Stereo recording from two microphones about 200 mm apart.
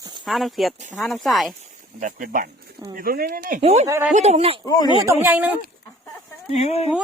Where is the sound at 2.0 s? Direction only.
45° right (ahead or behind).